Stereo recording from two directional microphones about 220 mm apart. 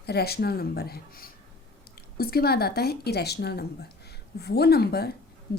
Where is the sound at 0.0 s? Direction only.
45° left (ahead or behind).